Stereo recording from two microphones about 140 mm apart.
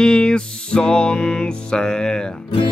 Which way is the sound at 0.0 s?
5° left (ahead or behind).